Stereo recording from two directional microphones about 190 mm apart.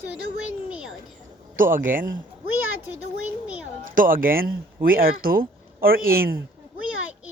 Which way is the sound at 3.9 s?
45° right (ahead or behind).